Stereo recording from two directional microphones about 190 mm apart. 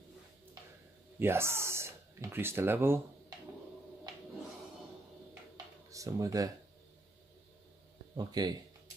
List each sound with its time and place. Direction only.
1.2 s speech: 15° right (ahead or behind)
5.9 s speech: 15° right (ahead or behind)
8.2 s speech: 20° right (ahead or behind)